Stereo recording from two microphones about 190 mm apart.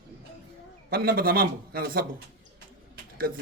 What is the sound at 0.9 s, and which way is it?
A man's voice, 50° right (ahead or behind).